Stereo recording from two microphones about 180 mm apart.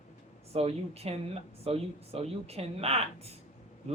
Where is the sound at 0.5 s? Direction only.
35° right (ahead or behind).